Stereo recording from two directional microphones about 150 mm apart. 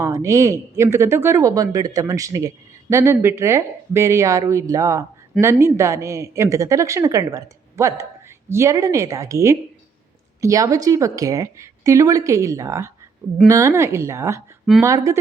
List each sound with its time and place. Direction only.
0.0 s a woman's voice: 20° right (ahead or behind)